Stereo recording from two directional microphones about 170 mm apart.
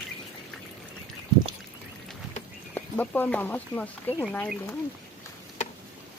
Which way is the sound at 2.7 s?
10° left (ahead or behind).